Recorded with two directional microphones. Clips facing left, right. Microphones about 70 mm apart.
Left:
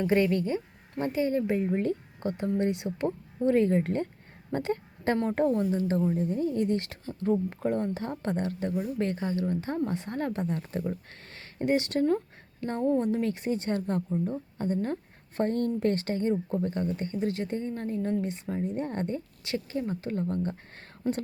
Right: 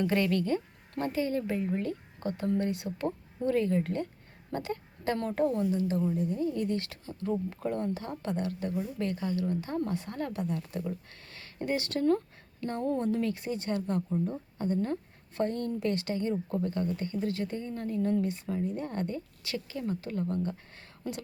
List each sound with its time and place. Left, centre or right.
0.0 s speech: left
12.8 s speech: centre
13.1 s speech: left